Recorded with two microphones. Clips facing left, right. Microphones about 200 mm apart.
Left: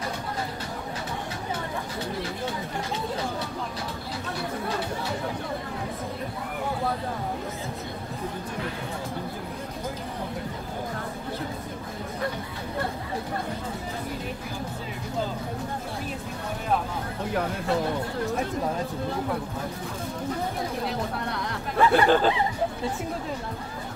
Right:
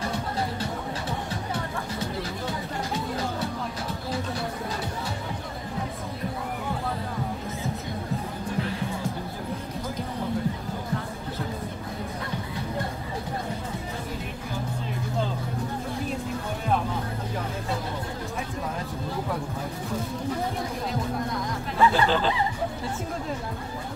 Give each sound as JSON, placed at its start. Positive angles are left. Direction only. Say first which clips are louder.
{"t": 21.3, "sound": "hubbub", "louder": "right 1 dB", "side_deg": 65}